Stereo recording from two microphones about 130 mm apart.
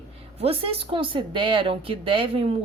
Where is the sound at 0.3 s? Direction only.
50° right (ahead or behind).